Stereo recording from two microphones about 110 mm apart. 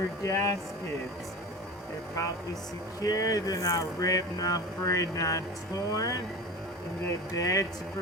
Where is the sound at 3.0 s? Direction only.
30° left (ahead or behind).